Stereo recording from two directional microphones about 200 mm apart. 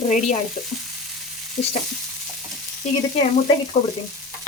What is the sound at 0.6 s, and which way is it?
Frying, 30° left (ahead or behind).